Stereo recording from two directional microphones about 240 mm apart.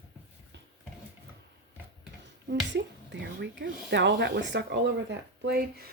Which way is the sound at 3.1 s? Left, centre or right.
Right.